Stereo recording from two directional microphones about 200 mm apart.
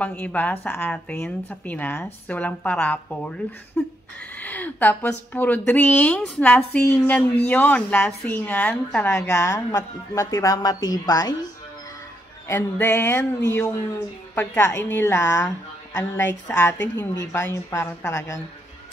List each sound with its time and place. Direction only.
0.0 s a woman's voice: 5° left (ahead or behind)
12.4 s speech: 10° left (ahead or behind)